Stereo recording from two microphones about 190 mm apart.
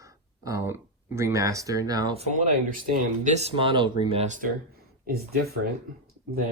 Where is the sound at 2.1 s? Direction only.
35° right (ahead or behind).